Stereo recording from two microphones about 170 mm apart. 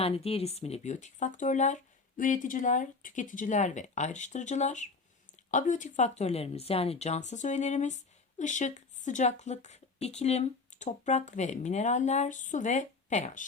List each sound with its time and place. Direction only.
0.0 s speech: 35° left (ahead or behind)